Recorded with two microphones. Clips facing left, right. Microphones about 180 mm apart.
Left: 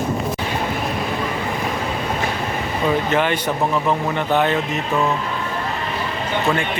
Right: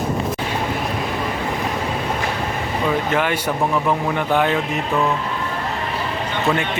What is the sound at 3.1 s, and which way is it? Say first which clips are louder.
Speech: left 1 dB; 10° right (ahead or behind).